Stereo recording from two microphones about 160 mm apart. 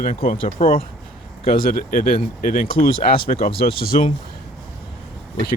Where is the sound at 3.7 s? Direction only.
70° left (ahead or behind).